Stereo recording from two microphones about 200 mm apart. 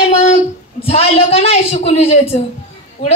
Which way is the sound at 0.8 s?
30° left (ahead or behind).